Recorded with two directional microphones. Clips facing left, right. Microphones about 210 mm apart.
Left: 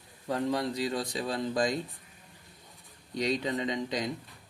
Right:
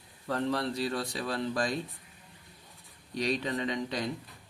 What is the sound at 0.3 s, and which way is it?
Speech, 15° left (ahead or behind).